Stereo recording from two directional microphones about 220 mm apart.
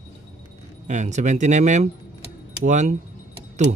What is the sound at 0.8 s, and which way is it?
Speech, 35° right (ahead or behind).